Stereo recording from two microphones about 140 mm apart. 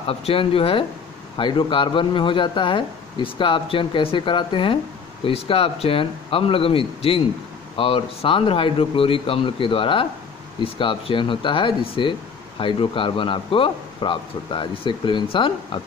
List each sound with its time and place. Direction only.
0.0 s speech: 40° left (ahead or behind)